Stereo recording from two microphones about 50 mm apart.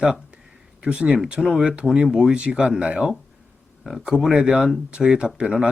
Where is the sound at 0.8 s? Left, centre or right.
Centre.